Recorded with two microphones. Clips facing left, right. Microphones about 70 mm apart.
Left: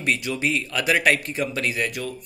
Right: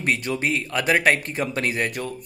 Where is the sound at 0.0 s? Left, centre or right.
Right.